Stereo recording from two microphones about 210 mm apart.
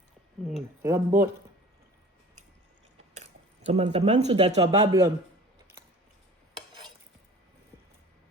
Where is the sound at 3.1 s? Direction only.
30° right (ahead or behind).